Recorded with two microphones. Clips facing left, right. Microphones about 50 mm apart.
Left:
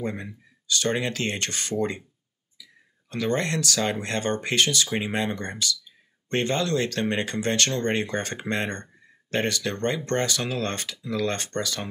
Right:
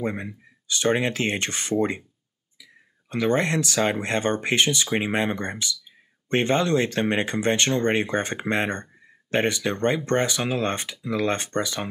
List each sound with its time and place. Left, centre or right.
0.0 s speech: centre